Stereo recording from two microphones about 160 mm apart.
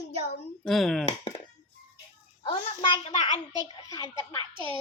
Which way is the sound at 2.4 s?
30° left (ahead or behind).